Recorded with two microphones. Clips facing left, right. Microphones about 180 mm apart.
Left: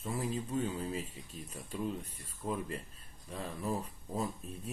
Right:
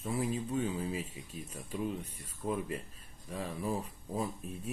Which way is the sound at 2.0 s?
80° right.